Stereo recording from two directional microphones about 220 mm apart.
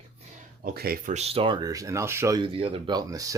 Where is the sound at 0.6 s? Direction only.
45° right (ahead or behind).